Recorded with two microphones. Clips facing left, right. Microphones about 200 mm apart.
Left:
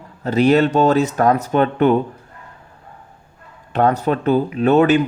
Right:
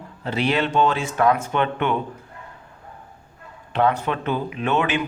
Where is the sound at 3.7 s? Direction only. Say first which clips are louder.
Left 4 dB; 45° left (ahead or behind).